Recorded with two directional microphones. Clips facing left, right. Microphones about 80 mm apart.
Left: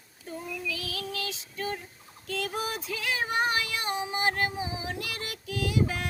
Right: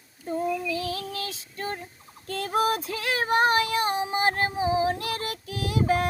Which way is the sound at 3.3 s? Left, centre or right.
Right.